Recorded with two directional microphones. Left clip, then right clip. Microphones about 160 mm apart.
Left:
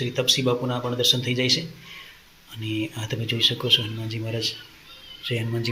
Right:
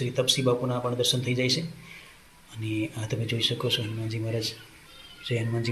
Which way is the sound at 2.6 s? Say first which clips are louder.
Left 2 dB; 5° left (ahead or behind).